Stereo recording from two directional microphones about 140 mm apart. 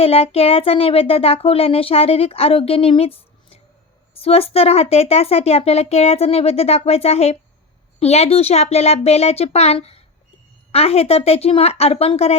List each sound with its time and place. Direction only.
0.0 s speech: 45° left (ahead or behind)